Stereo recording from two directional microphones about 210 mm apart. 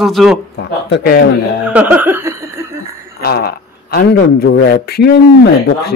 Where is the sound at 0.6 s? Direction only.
50° left (ahead or behind).